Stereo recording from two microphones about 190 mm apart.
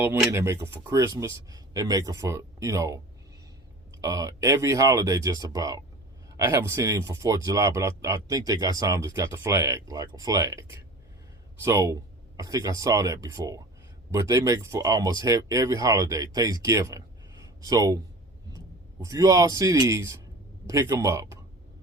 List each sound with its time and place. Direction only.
0.0 s speech: 10° right (ahead or behind)
4.0 s speech: 15° right (ahead or behind)
17.4 s a sound: 20° right (ahead or behind)
19.0 s speech: 15° right (ahead or behind)